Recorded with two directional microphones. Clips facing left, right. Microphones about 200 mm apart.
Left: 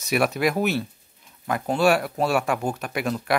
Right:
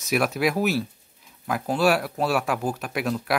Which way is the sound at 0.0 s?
Centre (ahead or behind).